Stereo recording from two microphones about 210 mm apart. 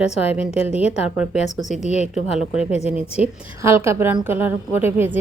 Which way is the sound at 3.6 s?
10° right (ahead or behind).